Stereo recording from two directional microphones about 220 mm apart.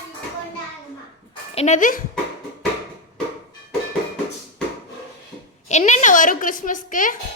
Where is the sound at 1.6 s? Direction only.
30° left (ahead or behind).